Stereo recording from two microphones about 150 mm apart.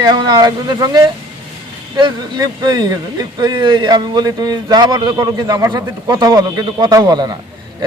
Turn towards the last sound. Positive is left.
turn(degrees=-25)  # may be behind; listen again after turning